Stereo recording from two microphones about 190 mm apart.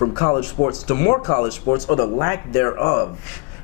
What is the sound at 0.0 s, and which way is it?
A man's voice, 20° left (ahead or behind).